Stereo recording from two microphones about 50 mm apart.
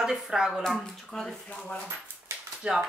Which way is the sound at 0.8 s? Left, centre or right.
Centre.